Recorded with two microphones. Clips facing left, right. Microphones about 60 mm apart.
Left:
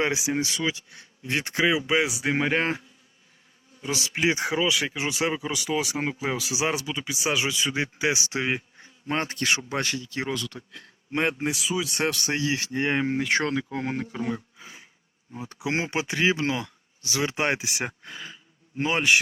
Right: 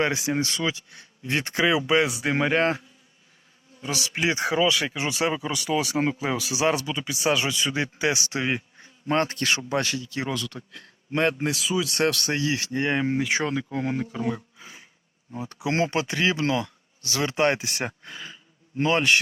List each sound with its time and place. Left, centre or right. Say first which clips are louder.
0.0 s speech: right 1 dB; centre
3.8 s speech: left 1 dB; left
9.4 s speech: right 1 dB; left
10.7 s speech: right 2 dB; centre
13.7 s speech: right 2 dB; left
15.6 s speech: right 3 dB; centre